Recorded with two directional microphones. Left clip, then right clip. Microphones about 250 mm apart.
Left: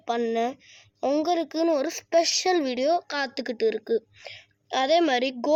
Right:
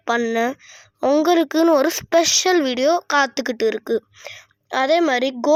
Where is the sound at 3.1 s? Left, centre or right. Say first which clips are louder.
Right 10 dB; right.